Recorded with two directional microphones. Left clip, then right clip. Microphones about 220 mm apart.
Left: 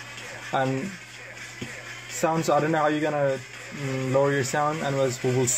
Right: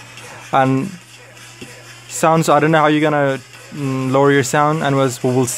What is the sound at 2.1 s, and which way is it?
Speech, 40° right (ahead or behind).